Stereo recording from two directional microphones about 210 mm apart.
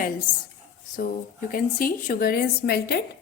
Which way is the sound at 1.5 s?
40° left (ahead or behind).